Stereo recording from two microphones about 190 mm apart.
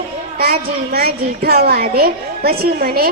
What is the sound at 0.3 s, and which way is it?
A woman's voice, 55° right (ahead or behind).